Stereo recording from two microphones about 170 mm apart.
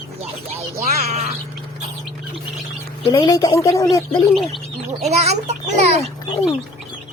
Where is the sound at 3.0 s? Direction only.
25° left (ahead or behind).